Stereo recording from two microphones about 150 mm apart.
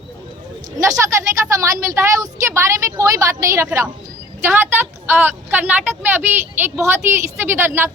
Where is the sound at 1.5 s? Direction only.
20° right (ahead or behind).